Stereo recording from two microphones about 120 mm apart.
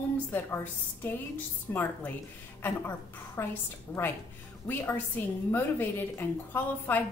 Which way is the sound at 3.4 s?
20° left (ahead or behind).